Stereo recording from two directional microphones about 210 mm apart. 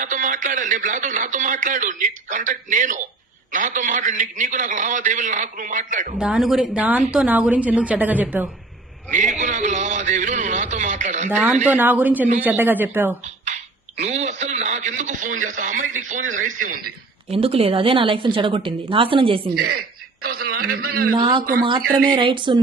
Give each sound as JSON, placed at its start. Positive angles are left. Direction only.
{"t": 0.0, "sound": "speech", "side_deg": -40}
{"t": 6.1, "sound": "a woman's voice", "side_deg": -5}
{"t": 9.0, "sound": "a man's voice", "side_deg": -35}
{"t": 11.6, "sound": "a woman's voice", "side_deg": -10}
{"t": 13.2, "sound": "speech", "side_deg": -35}
{"t": 17.3, "sound": "a woman's voice", "side_deg": -25}
{"t": 19.5, "sound": "a man's voice", "side_deg": -45}
{"t": 21.2, "sound": "a woman's voice", "side_deg": -20}